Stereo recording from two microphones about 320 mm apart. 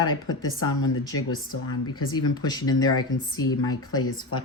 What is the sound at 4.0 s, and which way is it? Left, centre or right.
Speech, left.